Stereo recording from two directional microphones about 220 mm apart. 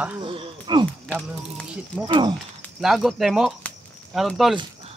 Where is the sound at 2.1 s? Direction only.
20° right (ahead or behind).